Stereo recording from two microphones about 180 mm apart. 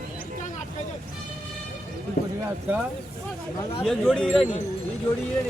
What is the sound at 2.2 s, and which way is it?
Clip-clop, 60° left (ahead or behind).